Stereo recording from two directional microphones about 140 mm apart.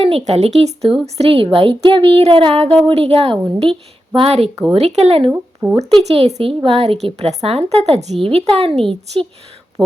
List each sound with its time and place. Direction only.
0.0 s a woman's voice: 50° right (ahead or behind)
5.3 s speech: 25° right (ahead or behind)
6.0 s a woman's voice: 50° right (ahead or behind)